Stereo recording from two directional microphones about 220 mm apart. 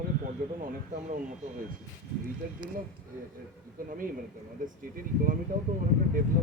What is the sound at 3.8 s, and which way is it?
Speech, 40° right (ahead or behind).